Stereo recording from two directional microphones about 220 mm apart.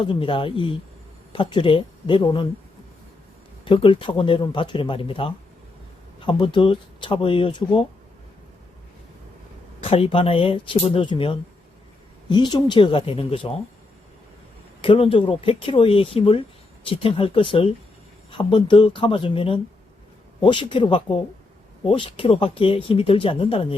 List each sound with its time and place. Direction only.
0.0 s speech: 25° left (ahead or behind)
3.6 s speech: 25° left (ahead or behind)
9.8 s speech: 25° left (ahead or behind)
14.8 s speech: 25° left (ahead or behind)